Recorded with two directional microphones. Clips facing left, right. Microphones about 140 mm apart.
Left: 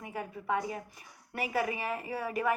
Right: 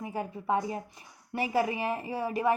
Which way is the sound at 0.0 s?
30° right (ahead or behind).